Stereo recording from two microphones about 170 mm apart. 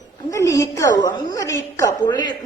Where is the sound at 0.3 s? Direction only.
20° left (ahead or behind).